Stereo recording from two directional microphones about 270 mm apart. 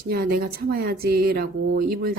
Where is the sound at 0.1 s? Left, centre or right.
Right.